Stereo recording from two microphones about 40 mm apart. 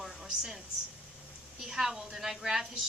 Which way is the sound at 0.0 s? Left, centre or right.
Centre.